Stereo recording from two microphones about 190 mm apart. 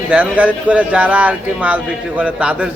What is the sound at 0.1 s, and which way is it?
Speech, 5° right (ahead or behind).